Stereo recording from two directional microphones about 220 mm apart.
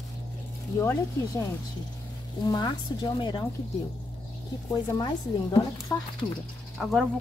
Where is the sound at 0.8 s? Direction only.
10° left (ahead or behind).